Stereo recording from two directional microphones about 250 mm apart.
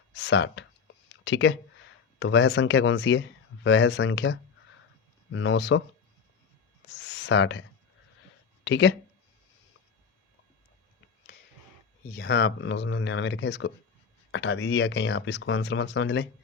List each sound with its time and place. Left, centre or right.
0.2 s speech: left
7.0 s a sound: left
8.6 s speech: left
12.1 s speech: left